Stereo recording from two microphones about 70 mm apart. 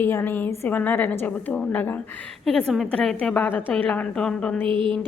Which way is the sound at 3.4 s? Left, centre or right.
Left.